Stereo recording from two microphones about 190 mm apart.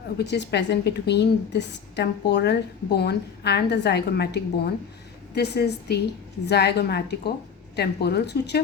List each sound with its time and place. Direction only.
0.2 s a woman's voice: 60° left (ahead or behind)